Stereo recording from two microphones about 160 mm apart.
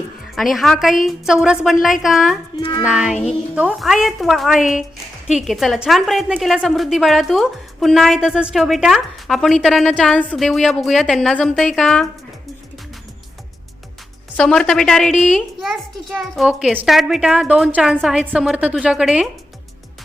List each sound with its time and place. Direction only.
0.3 s a woman's voice: centre (ahead or behind)
2.6 s music: 35° left (ahead or behind)
2.8 s a woman's voice: 5° right (ahead or behind)
14.3 s a woman's voice: 5° left (ahead or behind)